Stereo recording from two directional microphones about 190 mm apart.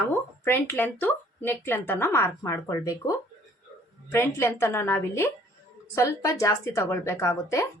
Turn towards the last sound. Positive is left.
turn(degrees=15)  # may be behind; listen again after turning